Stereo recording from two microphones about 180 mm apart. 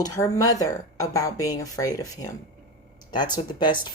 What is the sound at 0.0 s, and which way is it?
Speech, 20° left (ahead or behind).